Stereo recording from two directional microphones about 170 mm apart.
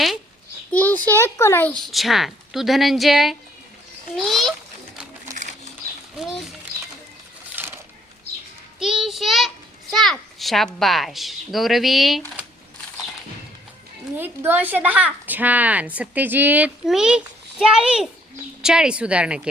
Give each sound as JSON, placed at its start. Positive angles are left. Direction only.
{"t": 0.7, "sound": "a child's voice", "side_deg": 10}
{"t": 5.3, "sound": "bird", "side_deg": -45}
{"t": 7.6, "sound": "a sound", "side_deg": -10}
{"t": 8.8, "sound": "a child's voice", "side_deg": -5}
{"t": 14.2, "sound": "a woman's voice", "side_deg": -10}